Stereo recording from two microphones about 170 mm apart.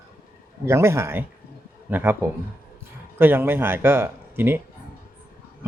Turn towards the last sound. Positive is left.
turn(degrees=-10)  # may be behind; listen again after turning